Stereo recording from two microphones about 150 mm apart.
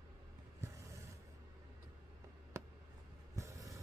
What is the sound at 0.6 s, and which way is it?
Vehicle, 20° right (ahead or behind).